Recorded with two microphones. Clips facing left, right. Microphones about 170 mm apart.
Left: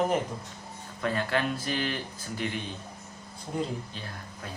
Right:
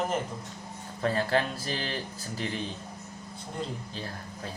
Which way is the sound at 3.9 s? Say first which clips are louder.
Right 3 dB; 35° right (ahead or behind).